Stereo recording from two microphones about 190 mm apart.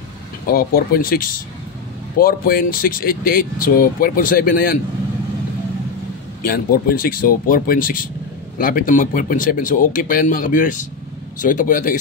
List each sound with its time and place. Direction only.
0.5 s speech: 50° left (ahead or behind)
6.4 s speech: 50° left (ahead or behind)